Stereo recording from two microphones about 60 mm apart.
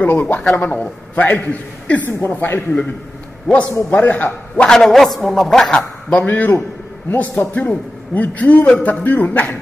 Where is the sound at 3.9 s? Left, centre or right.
Left.